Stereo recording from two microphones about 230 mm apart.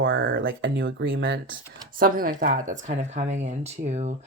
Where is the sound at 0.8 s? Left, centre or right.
Right.